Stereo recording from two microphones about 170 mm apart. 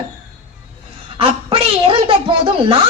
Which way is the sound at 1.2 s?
30° right (ahead or behind).